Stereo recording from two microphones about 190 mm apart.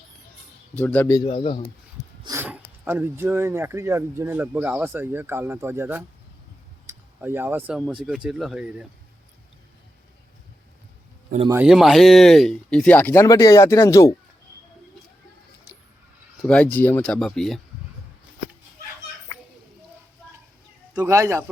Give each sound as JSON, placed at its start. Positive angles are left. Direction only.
{"t": 0.8, "sound": "speech", "side_deg": 10}
{"t": 1.3, "sound": "speech", "side_deg": 30}
{"t": 2.2, "sound": "speech", "side_deg": -15}
{"t": 11.4, "sound": "speech", "side_deg": -10}
{"t": 11.7, "sound": "speech", "side_deg": 0}
{"t": 16.4, "sound": "speech", "side_deg": 5}
{"t": 20.9, "sound": "speech", "side_deg": -10}